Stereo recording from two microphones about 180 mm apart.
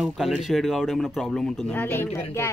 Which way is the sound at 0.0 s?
Centre (ahead or behind).